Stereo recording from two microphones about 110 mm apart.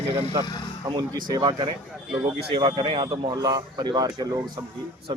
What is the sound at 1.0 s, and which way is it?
Speech, 40° right (ahead or behind).